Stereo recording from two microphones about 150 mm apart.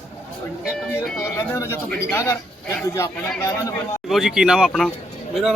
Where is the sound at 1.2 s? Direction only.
20° left (ahead or behind).